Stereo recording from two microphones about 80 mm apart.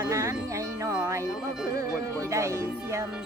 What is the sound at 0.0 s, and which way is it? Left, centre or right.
Music, right.